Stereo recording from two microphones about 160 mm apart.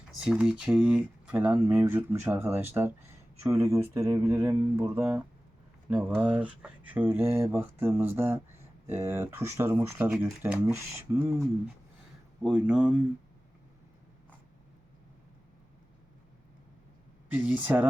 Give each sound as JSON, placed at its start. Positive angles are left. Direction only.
{"t": 0.3, "sound": "speech", "side_deg": -5}
{"t": 17.3, "sound": "speech", "side_deg": -10}